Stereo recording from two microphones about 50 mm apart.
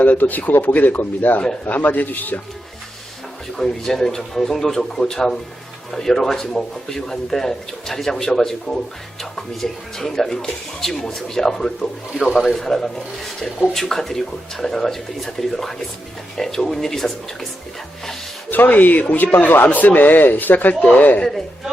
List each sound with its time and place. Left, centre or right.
0.0 s speech: left
3.6 s speech: centre
18.5 s speech: left